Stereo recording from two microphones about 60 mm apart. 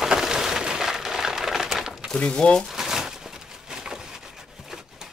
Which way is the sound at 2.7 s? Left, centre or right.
Centre.